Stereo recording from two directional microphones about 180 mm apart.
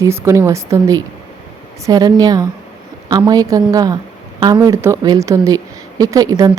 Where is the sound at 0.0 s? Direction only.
15° right (ahead or behind).